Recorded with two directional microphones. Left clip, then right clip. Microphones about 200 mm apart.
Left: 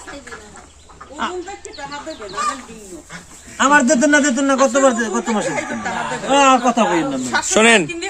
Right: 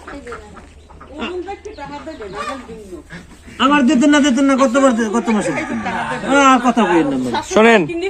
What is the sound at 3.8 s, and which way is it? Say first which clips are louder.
Speech: right 1 dB; centre (ahead or behind).